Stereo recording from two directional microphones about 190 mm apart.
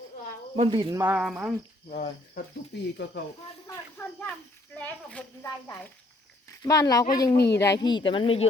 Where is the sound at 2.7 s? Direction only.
60° left (ahead or behind).